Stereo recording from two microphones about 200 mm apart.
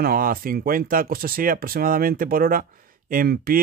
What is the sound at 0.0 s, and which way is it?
Speech, 45° right (ahead or behind).